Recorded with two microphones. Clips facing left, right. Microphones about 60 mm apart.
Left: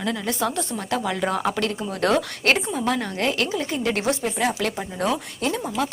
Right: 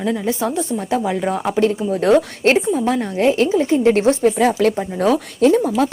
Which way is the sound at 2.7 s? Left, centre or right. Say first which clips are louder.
Right 6 dB; right.